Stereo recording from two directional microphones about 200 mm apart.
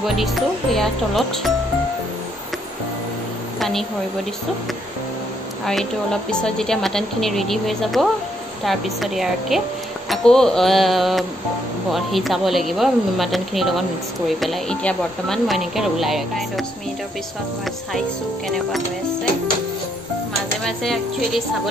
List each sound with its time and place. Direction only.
0.0 s speech: centre (ahead or behind)
3.5 s a sound: centre (ahead or behind)
6.4 s speech: 5° left (ahead or behind)
20.6 s speech: centre (ahead or behind)